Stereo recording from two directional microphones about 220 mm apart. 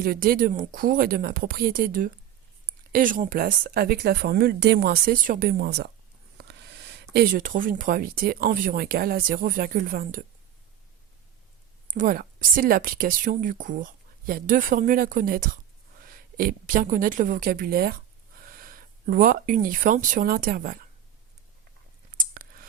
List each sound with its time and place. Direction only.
0.0 s speech: 40° right (ahead or behind)
11.9 s a woman's voice: 40° right (ahead or behind)
22.2 s a sound: 40° right (ahead or behind)